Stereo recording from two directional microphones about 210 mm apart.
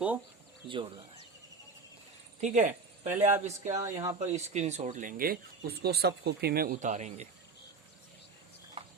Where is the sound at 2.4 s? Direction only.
35° right (ahead or behind).